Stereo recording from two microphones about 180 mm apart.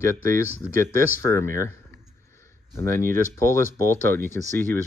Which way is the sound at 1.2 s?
15° left (ahead or behind).